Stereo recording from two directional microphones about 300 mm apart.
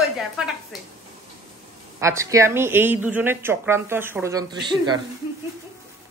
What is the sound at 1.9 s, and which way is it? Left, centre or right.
Speech, centre.